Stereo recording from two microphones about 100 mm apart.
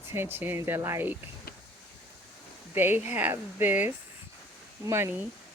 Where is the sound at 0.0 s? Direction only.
25° right (ahead or behind).